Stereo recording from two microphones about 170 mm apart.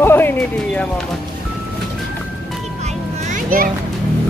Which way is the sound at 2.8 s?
45° right (ahead or behind).